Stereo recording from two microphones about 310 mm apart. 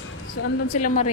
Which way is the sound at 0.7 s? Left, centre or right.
Left.